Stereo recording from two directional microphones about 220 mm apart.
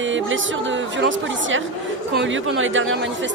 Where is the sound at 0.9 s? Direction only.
60° right (ahead or behind).